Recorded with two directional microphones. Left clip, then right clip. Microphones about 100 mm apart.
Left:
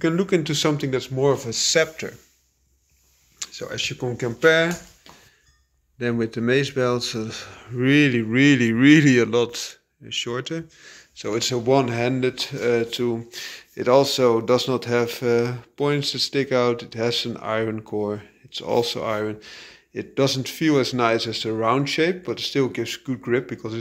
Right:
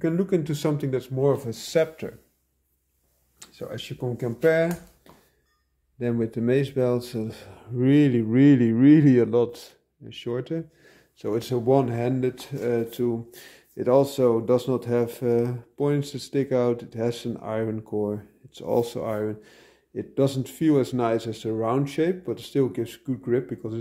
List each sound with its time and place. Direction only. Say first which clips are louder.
0.0 s speech: left 3 dB; 5° right (ahead or behind)
1.4 s speech: left 4 dB; 35° right (ahead or behind)
3.3 s a sound: left 7 dB; 25° right (ahead or behind)
4.4 s speech: left 4 dB; 10° right (ahead or behind)
7.5 s speech: left 2 dB; 30° right (ahead or behind)
8.7 s speech: left 2 dB; 15° right (ahead or behind); by 10.6 s 35° right (ahead or behind)
10.8 s speech: left 3 dB; 50° right (ahead or behind)
11.6 s speech: left 2 dB; 30° right (ahead or behind)
12.1 s speech: left 4 dB; 20° right (ahead or behind)
18.5 s speech: left 3 dB; 40° right (ahead or behind)